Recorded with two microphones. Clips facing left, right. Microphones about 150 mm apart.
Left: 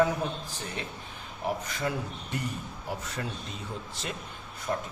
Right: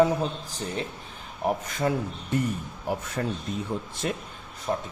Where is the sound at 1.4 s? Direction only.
50° right (ahead or behind).